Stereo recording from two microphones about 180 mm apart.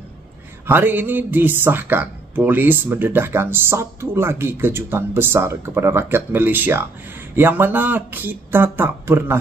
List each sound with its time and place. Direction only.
0.7 s speech: 10° right (ahead or behind)